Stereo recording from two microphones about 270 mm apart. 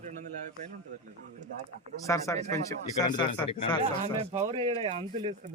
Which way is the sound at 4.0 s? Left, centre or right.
Right.